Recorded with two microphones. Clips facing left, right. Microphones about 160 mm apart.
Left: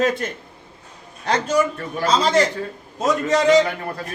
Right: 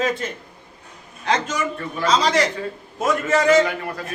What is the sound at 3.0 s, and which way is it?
Speech, 20° left (ahead or behind).